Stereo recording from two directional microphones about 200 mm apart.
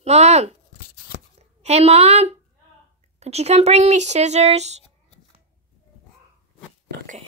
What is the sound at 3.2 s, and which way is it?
Speech, 30° right (ahead or behind).